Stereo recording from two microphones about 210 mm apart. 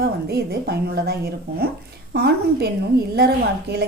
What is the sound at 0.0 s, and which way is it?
A woman's voice, 50° right (ahead or behind).